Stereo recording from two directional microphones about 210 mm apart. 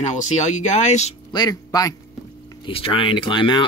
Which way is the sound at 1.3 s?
20° left (ahead or behind).